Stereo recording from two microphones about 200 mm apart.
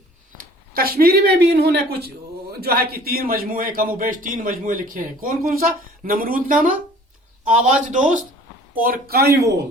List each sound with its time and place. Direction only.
0.3 s a man's voice: 50° right (ahead or behind)